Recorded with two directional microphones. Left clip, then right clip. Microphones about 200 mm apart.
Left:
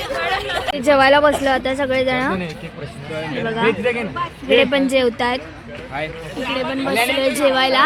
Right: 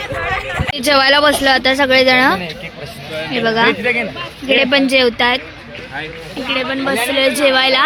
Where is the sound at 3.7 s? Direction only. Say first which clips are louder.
Right 4 dB; 55° left (ahead or behind).